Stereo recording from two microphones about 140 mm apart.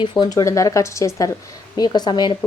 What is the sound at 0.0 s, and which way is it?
A woman's voice, 35° left (ahead or behind).